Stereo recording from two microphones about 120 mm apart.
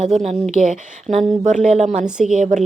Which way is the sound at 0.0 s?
75° right (ahead or behind).